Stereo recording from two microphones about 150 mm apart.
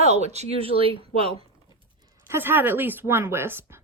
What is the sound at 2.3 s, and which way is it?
A woman's voice, 15° right (ahead or behind).